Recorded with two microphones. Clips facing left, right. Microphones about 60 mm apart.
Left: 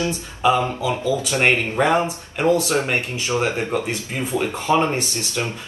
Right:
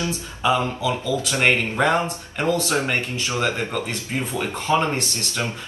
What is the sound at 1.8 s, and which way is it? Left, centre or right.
Speech, centre.